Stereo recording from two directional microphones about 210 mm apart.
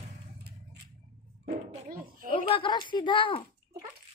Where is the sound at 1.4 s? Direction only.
40° right (ahead or behind).